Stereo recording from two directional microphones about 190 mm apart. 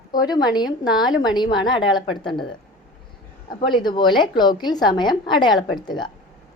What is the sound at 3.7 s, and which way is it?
A woman's voice, 25° left (ahead or behind).